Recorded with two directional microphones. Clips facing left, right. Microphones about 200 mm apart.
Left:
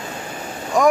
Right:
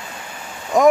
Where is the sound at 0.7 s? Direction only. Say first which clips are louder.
Right 3 dB; 20° right (ahead or behind).